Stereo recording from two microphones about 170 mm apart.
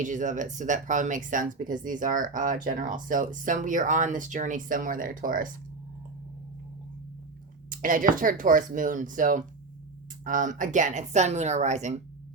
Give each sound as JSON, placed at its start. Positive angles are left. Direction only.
{"t": 0.0, "sound": "speech", "side_deg": -50}
{"t": 7.7, "sound": "speech", "side_deg": -55}